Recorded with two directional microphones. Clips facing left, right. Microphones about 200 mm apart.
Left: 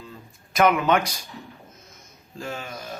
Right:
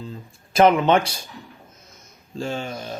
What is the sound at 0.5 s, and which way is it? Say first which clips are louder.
Speech: right 4 dB; 30° right (ahead or behind).